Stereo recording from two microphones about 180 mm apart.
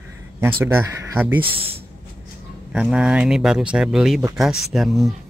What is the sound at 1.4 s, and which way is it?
Speech, 30° right (ahead or behind).